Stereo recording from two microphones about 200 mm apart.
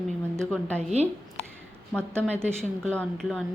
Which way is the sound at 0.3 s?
5° left (ahead or behind).